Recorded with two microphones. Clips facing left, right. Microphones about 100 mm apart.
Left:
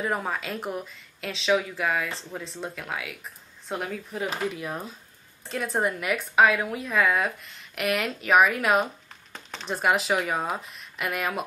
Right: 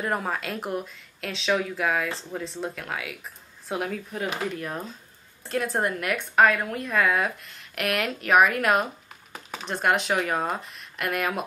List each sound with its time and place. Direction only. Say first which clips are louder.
0.0 s a woman's voice: right 1 dB; centre (ahead or behind)